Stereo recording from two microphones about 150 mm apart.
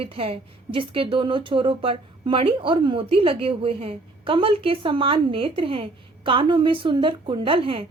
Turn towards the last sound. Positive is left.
turn(degrees=-40)  # may be behind; listen again after turning